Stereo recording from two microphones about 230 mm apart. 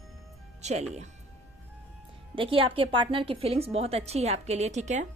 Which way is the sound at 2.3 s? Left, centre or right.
Right.